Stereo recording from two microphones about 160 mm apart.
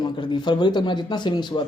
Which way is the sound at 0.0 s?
30° left (ahead or behind).